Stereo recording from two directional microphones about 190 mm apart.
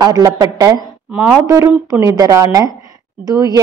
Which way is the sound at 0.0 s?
20° right (ahead or behind).